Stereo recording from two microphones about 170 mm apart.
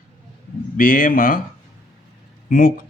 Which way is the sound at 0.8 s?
55° left (ahead or behind).